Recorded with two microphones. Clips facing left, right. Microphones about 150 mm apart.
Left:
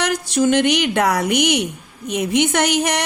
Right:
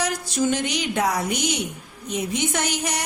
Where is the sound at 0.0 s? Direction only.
70° left (ahead or behind).